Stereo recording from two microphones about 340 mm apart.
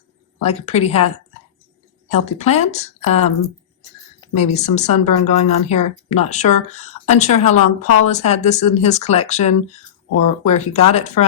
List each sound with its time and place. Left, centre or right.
0.4 s speech: centre
2.1 s speech: centre